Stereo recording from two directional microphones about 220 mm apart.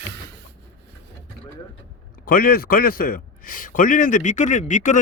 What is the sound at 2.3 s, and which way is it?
A man's voice, 40° left (ahead or behind).